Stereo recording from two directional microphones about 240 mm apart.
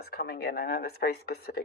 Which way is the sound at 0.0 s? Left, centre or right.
Left.